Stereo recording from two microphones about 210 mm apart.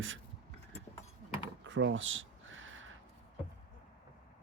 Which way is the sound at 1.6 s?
60° right (ahead or behind).